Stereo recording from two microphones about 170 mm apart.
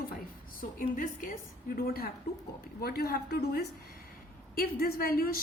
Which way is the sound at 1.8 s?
65° left (ahead or behind).